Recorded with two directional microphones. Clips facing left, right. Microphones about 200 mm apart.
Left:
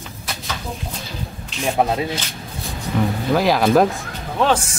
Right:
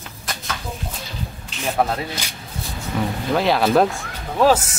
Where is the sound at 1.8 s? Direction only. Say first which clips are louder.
Left 2 dB; 20° left (ahead or behind).